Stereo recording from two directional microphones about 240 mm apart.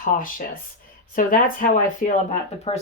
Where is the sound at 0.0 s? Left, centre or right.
Left.